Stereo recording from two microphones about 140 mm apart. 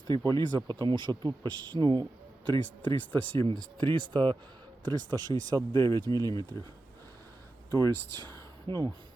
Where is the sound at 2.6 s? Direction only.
10° left (ahead or behind).